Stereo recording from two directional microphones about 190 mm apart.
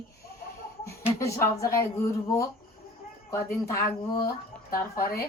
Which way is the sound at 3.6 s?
15° left (ahead or behind).